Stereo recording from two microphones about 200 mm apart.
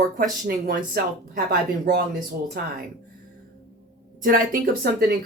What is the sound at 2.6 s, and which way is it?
Speech, 50° right (ahead or behind).